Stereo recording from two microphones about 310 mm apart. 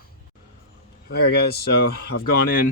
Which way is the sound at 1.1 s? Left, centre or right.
Left.